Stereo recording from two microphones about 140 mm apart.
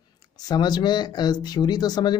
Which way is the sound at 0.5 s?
30° left (ahead or behind).